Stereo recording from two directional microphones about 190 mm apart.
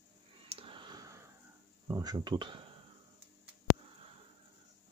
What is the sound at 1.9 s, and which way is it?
Speech, 20° right (ahead or behind).